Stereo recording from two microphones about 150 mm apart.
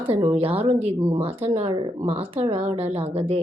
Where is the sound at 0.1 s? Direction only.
35° right (ahead or behind).